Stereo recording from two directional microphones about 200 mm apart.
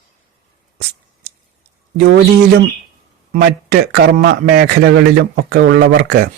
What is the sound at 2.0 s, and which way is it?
Speech, 50° right (ahead or behind).